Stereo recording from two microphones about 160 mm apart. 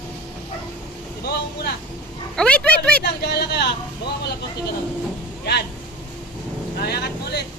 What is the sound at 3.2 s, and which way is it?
Speech, 90° left.